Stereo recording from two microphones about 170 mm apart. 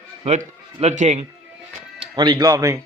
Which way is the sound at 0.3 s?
40° right (ahead or behind).